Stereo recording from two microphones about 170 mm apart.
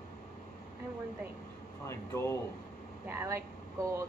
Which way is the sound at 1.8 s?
15° left (ahead or behind).